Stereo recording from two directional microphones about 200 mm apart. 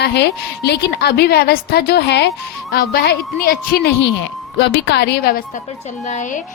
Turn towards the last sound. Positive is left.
turn(degrees=35)  # may be behind; listen again after turning